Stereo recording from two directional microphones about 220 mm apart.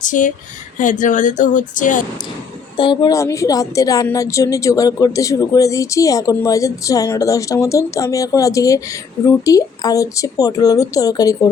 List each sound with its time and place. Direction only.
0.0 s speech: 35° left (ahead or behind)
2.7 s a woman's voice: 20° left (ahead or behind)